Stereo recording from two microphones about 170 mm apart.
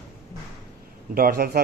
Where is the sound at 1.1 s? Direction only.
60° right (ahead or behind).